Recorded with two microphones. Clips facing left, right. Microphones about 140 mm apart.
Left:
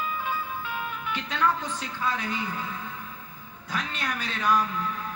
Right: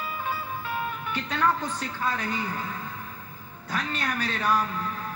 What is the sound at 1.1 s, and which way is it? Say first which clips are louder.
A woman's voice: right 1 dB; 45° right (ahead or behind).